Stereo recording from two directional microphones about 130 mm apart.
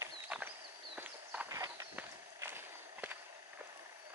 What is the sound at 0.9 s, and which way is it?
Horse, 15° right (ahead or behind).